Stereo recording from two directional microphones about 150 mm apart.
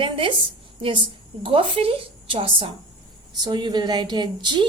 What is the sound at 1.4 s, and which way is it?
A woman's voice, 35° right (ahead or behind).